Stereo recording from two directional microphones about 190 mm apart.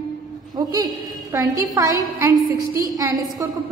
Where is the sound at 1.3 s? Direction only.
15° right (ahead or behind).